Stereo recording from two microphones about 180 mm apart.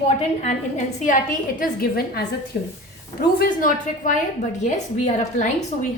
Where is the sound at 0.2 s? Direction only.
40° left (ahead or behind).